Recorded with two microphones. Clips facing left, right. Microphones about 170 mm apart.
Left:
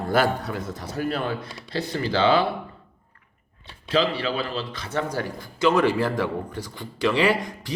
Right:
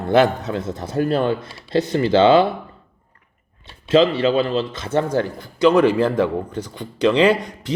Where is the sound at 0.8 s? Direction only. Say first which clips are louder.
Right 7 dB; 50° right (ahead or behind).